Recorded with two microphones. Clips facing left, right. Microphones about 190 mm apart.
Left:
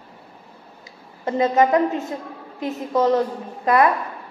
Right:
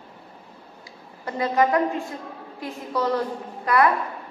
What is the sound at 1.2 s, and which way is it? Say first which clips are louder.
A woman's voice: left 4 dB; 20° left (ahead or behind).